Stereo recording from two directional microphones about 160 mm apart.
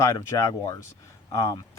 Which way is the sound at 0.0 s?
20° left (ahead or behind).